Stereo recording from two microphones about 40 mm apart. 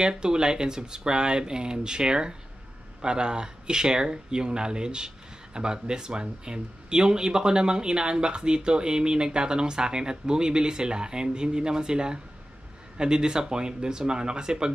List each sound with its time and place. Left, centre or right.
0.0 s speech: right